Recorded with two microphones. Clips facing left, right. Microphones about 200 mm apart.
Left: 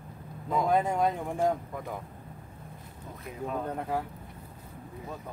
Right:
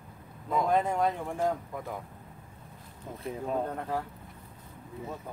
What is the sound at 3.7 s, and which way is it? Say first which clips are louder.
Speech: left 1 dB; 10° left (ahead or behind).